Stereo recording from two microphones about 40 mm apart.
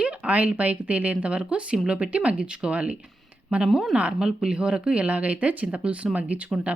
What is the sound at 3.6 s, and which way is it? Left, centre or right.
Speech, centre.